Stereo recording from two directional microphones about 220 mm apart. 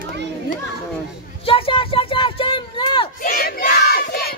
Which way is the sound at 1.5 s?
25° left (ahead or behind).